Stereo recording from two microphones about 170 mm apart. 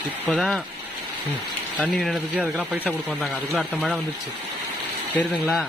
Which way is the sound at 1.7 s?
5° right (ahead or behind).